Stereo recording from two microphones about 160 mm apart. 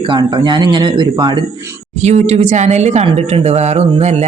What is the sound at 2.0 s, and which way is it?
Speech, 45° right (ahead or behind).